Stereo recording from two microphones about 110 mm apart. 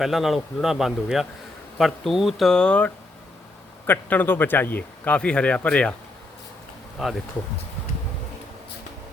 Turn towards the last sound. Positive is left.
turn(degrees=0)  # may be behind; listen again after turning